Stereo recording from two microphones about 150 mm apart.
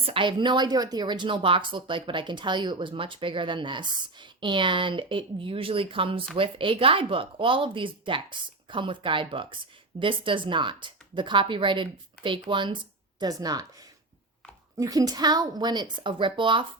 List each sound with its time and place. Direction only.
0.0 s a woman's voice: 35° right (ahead or behind)
14.8 s a woman's voice: 25° right (ahead or behind)